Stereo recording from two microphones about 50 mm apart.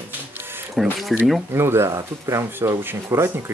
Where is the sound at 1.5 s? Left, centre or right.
Right.